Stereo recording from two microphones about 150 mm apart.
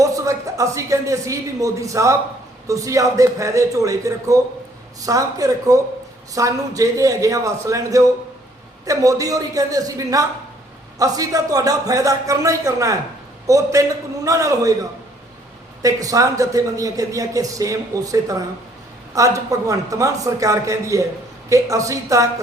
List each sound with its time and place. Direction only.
0.0 s a man's voice: 20° right (ahead or behind)
15.8 s a man's voice: 25° right (ahead or behind)